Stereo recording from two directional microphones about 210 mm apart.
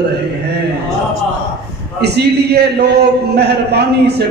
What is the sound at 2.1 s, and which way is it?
A man's voice, 50° right (ahead or behind).